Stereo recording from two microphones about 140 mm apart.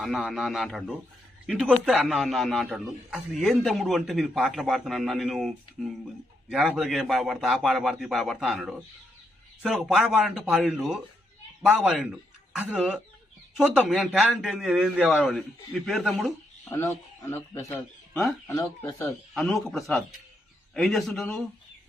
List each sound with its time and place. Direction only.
0.0 s a man's voice: centre (ahead or behind)
17.3 s speech: 20° left (ahead or behind)
19.3 s a man's voice: centre (ahead or behind)